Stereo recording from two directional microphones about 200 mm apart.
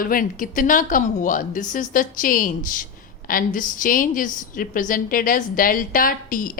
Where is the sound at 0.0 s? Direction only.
45° left (ahead or behind).